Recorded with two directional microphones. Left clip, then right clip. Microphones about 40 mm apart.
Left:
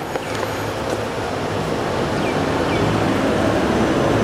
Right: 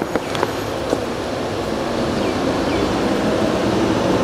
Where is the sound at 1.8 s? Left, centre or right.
Left.